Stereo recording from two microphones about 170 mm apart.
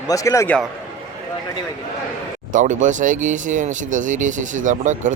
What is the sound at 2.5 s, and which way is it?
Speech, 50° right (ahead or behind).